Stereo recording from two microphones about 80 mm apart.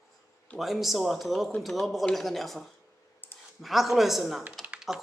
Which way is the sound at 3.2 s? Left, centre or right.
Left.